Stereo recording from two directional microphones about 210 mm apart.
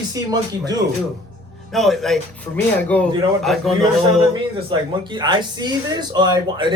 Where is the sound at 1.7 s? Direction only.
Centre (ahead or behind).